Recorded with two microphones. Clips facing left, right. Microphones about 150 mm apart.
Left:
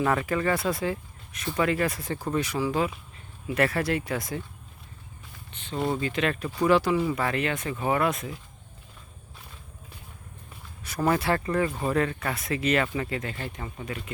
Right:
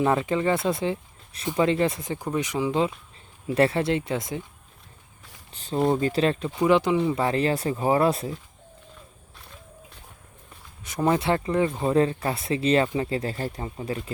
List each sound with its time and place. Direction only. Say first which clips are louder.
0.0 s speech: right 3 dB; 25° right (ahead or behind)
5.5 s speech: right 5 dB; 35° right (ahead or behind)
10.8 s speech: right 2 dB; 20° right (ahead or behind)